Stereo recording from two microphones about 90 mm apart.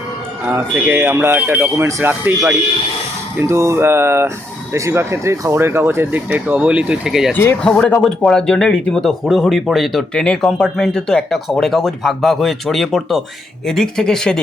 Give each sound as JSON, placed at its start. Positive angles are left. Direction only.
{"t": 0.5, "sound": "speech", "side_deg": -20}
{"t": 3.3, "sound": "speech", "side_deg": -30}
{"t": 6.1, "sound": "speech", "side_deg": -20}
{"t": 7.6, "sound": "speech", "side_deg": 10}